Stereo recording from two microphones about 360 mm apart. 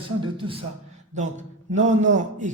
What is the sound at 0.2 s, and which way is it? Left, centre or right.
A man's voice, centre.